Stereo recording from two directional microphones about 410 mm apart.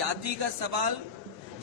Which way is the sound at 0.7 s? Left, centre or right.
Right.